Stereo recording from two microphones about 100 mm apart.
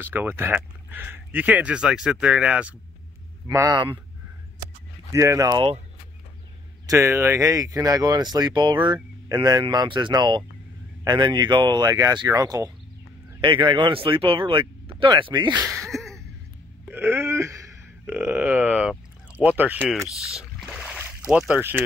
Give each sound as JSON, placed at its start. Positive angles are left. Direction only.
{"t": 0.0, "sound": "speech", "side_deg": -20}
{"t": 3.4, "sound": "speech", "side_deg": -35}
{"t": 5.1, "sound": "speech", "side_deg": -30}
{"t": 6.9, "sound": "speech", "side_deg": -30}
{"t": 13.4, "sound": "speech", "side_deg": -55}
{"t": 15.7, "sound": "a sound", "side_deg": 5}
{"t": 16.8, "sound": "wail", "side_deg": -25}
{"t": 18.0, "sound": "speech", "side_deg": -20}
{"t": 20.3, "sound": "a sound", "side_deg": -5}
{"t": 21.3, "sound": "speech", "side_deg": -10}
{"t": 21.5, "sound": "speech", "side_deg": -20}